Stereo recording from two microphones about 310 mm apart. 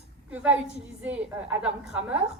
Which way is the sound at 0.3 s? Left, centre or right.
Centre.